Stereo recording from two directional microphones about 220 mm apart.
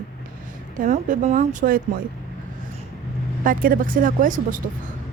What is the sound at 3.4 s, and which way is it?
Speech, 40° right (ahead or behind).